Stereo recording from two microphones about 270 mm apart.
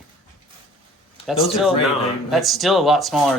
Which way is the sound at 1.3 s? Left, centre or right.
Centre.